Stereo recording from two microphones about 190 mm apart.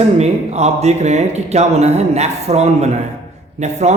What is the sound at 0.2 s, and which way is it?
A man's voice, 35° right (ahead or behind).